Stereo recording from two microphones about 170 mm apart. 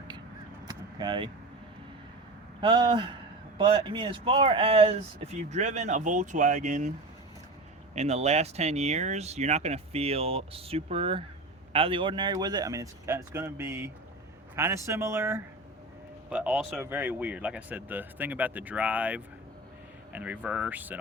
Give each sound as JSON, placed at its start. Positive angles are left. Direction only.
{"t": 0.7, "sound": "vehicle", "side_deg": -25}
{"t": 2.6, "sound": "speech", "side_deg": -25}
{"t": 7.9, "sound": "a man's voice", "side_deg": -40}